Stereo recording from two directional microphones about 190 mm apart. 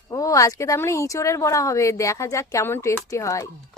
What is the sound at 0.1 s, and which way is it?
A woman's voice, 20° left (ahead or behind).